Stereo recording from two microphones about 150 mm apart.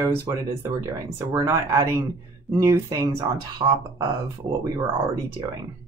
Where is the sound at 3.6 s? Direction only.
30° right (ahead or behind).